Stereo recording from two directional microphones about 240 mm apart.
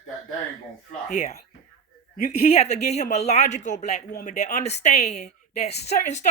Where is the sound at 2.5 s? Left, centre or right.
Left.